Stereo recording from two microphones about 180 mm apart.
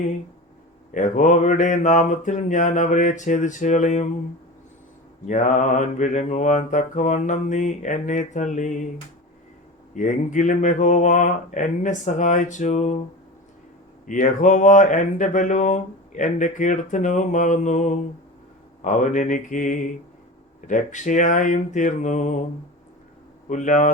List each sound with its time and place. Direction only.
0.9 s speech: 45° left (ahead or behind)
5.2 s speech: 45° left (ahead or behind)
9.9 s speech: 45° left (ahead or behind)
14.1 s speech: 45° left (ahead or behind)
23.5 s speech: 45° left (ahead or behind)